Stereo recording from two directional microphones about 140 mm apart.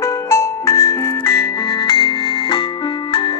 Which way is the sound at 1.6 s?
30° left (ahead or behind).